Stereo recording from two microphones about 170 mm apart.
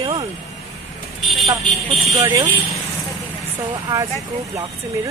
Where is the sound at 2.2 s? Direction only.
30° right (ahead or behind).